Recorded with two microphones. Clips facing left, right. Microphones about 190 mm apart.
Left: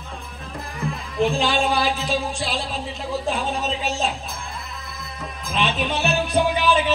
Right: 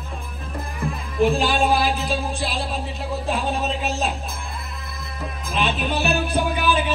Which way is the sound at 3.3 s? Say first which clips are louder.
Right 1 dB; centre (ahead or behind).